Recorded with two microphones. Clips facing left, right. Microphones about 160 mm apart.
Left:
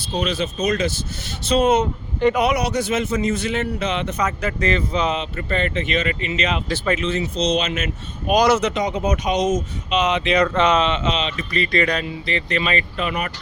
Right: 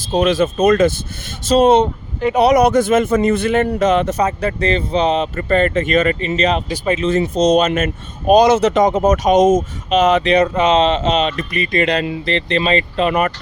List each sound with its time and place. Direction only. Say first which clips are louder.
0.3 s speech: right 10 dB; 50° right (ahead or behind)
1.5 s speech: right 6 dB; 35° right (ahead or behind)
2.6 s speech: right 9 dB; 50° right (ahead or behind)
4.2 s speech: right 5 dB; 35° right (ahead or behind)
6.7 s speech: right 3 dB; 20° right (ahead or behind)
7.0 s speech: right 7 dB; 45° right (ahead or behind)
8.3 s speech: right 6 dB; 25° right (ahead or behind)
8.6 s speech: right 8 dB; 45° right (ahead or behind)
10.5 s speech: right 3 dB; 20° right (ahead or behind)
10.8 s speech: right 6 dB; 35° right (ahead or behind)
11.5 s speech: even; 20° right (ahead or behind)
12.5 s speech: right 6 dB; 30° right (ahead or behind)
13.1 s speech: right 11 dB; 50° right (ahead or behind)